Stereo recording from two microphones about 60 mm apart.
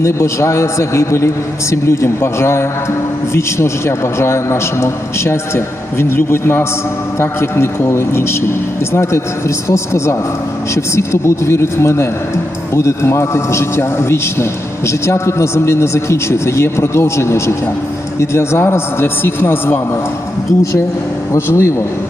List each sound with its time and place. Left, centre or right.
0.0 s a man's voice: left
21.3 s a man's voice: left